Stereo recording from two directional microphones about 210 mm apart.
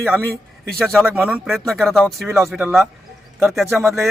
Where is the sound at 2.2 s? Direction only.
15° right (ahead or behind).